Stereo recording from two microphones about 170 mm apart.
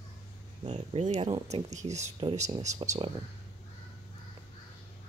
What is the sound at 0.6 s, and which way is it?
Speech, 45° right (ahead or behind).